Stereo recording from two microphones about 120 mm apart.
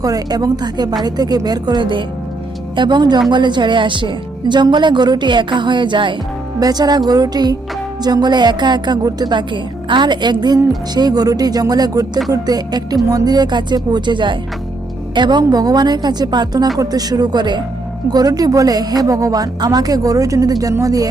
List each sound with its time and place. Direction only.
0.0 s speech: 30° right (ahead or behind)